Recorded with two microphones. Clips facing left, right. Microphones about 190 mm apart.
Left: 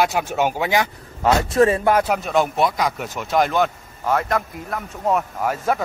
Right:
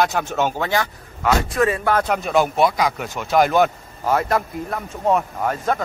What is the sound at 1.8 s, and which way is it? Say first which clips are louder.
Speech: left 2 dB; 10° left (ahead or behind).